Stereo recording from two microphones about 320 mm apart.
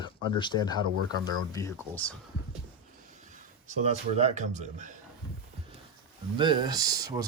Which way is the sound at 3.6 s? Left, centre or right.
Centre.